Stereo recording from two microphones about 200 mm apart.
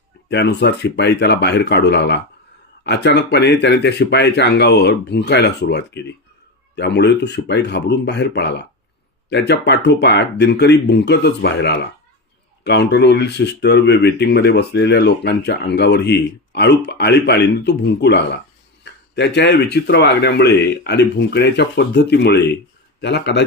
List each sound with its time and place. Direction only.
0.3 s speech: 60° left (ahead or behind)